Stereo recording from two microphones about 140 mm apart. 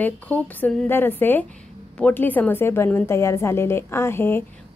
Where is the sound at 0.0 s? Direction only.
10° left (ahead or behind).